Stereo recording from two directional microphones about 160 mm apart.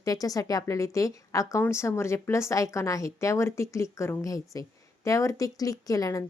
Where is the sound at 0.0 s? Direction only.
20° left (ahead or behind).